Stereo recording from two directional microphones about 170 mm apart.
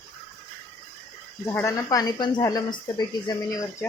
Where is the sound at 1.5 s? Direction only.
20° left (ahead or behind).